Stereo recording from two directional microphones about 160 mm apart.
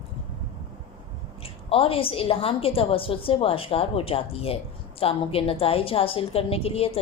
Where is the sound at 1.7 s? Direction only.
35° left (ahead or behind).